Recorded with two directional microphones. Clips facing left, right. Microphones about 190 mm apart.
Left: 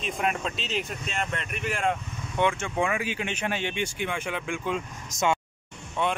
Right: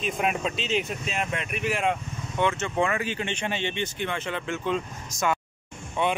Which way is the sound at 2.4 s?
10° left (ahead or behind).